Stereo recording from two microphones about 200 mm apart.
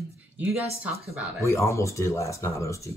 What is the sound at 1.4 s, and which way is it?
Speech, 15° left (ahead or behind).